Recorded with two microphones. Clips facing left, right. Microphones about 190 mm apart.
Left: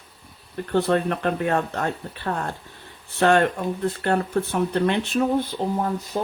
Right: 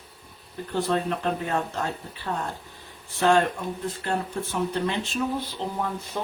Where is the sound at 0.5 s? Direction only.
60° left (ahead or behind).